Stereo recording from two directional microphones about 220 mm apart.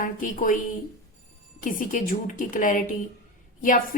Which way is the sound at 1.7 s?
35° left (ahead or behind).